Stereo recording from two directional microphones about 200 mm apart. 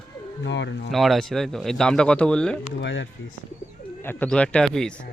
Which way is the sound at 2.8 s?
65° left (ahead or behind).